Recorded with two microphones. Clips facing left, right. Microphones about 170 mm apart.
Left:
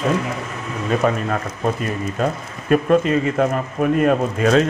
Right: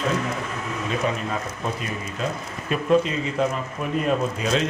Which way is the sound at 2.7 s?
55° left (ahead or behind).